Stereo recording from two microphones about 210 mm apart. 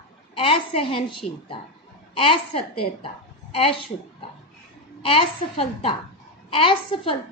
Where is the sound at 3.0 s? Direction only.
25° left (ahead or behind).